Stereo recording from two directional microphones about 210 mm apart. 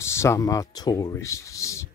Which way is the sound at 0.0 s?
15° left (ahead or behind).